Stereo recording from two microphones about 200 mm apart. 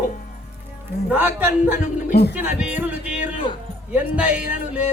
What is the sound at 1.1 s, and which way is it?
Music, 10° right (ahead or behind).